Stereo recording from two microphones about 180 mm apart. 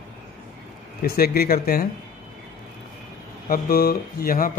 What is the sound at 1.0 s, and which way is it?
Speech, 55° left (ahead or behind).